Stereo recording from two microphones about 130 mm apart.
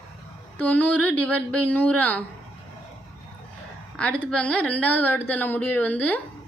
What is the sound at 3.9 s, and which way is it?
Speech, 10° left (ahead or behind).